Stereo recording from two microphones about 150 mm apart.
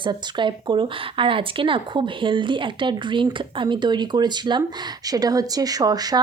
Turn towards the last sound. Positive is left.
turn(degrees=-25)  # may be behind; listen again after turning